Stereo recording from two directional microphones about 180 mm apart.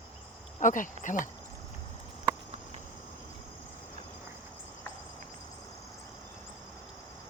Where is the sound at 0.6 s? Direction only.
45° left (ahead or behind).